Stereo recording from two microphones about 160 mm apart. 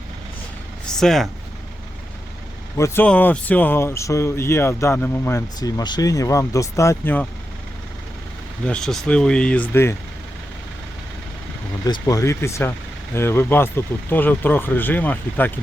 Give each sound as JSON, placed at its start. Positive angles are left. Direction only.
{"t": 0.9, "sound": "speech", "side_deg": 5}
{"t": 2.7, "sound": "speech", "side_deg": 15}
{"t": 8.6, "sound": "speech", "side_deg": 5}
{"t": 11.9, "sound": "speech", "side_deg": 20}